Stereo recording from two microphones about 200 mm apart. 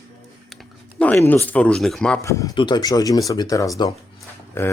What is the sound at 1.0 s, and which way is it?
Speech, 5° left (ahead or behind).